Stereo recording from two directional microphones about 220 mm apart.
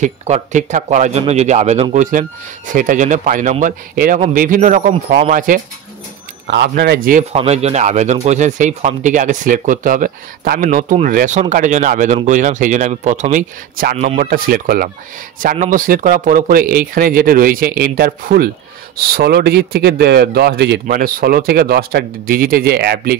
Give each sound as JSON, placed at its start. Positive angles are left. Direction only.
{"t": 0.0, "sound": "speech", "side_deg": -35}
{"t": 6.4, "sound": "a man's voice", "side_deg": -50}
{"t": 7.3, "sound": "a man's voice", "side_deg": -30}